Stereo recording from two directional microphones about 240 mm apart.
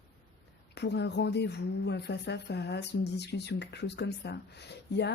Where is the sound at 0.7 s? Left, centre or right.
Left.